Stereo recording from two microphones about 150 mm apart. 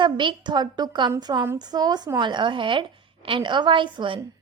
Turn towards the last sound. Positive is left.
turn(degrees=-35)  # may be behind; listen again after turning